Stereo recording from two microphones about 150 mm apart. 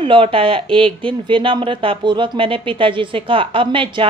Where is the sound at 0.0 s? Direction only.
35° right (ahead or behind).